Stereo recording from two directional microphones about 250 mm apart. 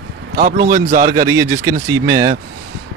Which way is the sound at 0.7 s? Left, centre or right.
Right.